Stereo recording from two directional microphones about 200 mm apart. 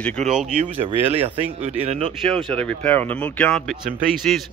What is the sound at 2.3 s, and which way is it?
Speech, 5° left (ahead or behind).